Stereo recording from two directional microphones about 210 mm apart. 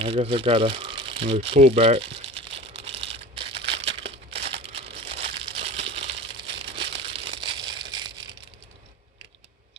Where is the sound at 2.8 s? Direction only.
30° right (ahead or behind).